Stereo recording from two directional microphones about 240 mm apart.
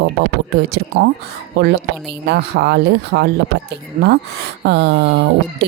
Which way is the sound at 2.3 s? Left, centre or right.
Right.